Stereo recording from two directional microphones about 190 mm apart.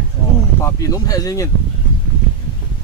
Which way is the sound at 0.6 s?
20° left (ahead or behind).